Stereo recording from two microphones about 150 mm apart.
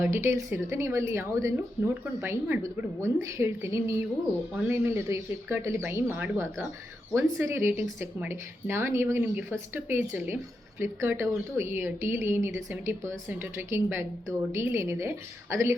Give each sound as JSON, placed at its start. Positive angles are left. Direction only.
{"t": 0.0, "sound": "speech", "side_deg": -20}